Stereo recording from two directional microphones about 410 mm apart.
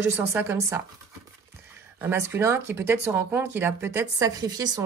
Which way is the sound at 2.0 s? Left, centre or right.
Centre.